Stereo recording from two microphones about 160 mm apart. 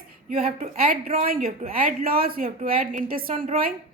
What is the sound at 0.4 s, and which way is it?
A woman's voice, 65° right (ahead or behind).